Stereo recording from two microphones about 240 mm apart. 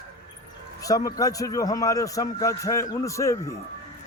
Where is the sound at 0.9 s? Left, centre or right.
Centre.